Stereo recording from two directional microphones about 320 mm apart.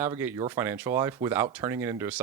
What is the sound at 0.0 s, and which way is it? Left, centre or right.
Speech, centre.